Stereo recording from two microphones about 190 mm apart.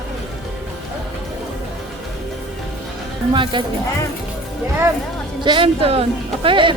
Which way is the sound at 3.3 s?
25° right (ahead or behind).